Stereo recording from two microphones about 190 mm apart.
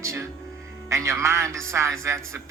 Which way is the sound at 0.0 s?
15° right (ahead or behind).